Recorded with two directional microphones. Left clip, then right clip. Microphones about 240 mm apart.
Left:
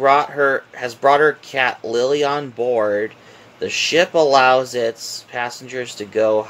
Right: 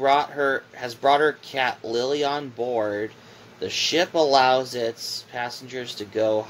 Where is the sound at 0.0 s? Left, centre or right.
Left.